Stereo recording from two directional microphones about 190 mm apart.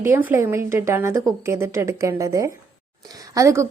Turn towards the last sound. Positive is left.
turn(degrees=-15)  # may be behind; listen again after turning